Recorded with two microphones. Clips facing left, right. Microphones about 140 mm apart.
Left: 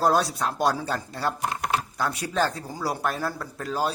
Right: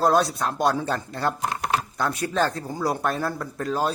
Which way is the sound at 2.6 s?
10° left (ahead or behind).